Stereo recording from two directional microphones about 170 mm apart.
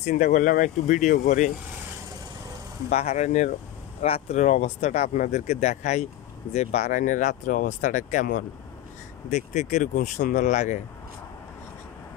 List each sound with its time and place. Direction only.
0.0 s speech: 45° left (ahead or behind)
2.9 s speech: 40° left (ahead or behind)